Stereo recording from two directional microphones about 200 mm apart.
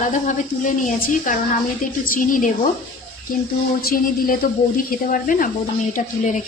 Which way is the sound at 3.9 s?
45° left (ahead or behind).